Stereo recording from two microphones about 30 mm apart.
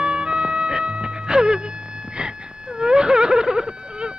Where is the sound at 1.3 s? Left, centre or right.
Right.